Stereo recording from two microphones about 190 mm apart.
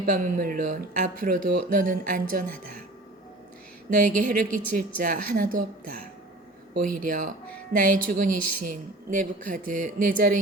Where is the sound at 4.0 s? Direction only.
40° right (ahead or behind).